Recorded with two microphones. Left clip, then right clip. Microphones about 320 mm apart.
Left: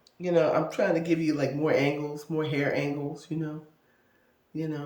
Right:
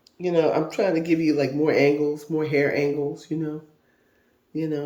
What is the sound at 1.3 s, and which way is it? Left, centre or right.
Speech, left.